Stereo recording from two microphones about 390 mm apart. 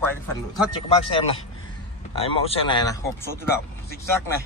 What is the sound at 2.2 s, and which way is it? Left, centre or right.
A man's voice, centre.